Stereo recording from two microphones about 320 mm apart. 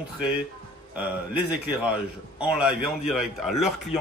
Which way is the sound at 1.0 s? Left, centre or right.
Centre.